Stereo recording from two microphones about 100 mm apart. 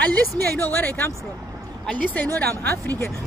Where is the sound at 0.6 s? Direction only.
20° left (ahead or behind).